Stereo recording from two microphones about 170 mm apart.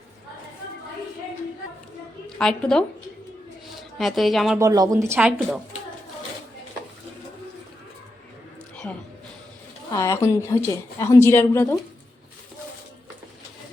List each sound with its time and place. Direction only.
2.4 s a woman's voice: 5° left (ahead or behind)
3.9 s a woman's voice: centre (ahead or behind)
4.5 s speech: 20° right (ahead or behind)
8.7 s a sound: 10° left (ahead or behind)
9.9 s a woman's voice: 20° left (ahead or behind)